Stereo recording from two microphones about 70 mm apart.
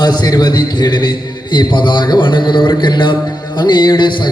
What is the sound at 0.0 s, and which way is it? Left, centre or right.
A man's voice, left.